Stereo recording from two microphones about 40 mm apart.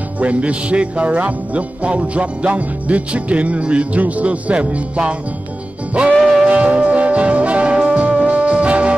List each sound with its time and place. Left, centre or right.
0.2 s speech: right
6.1 s music: centre
6.5 s music: right